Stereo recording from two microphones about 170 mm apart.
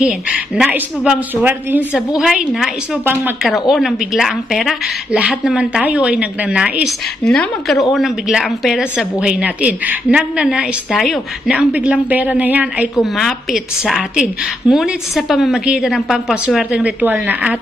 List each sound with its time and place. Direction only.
0.0 s a woman's voice: 5° right (ahead or behind)